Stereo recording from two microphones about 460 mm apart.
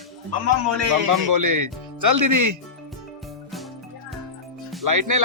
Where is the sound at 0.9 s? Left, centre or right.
Right.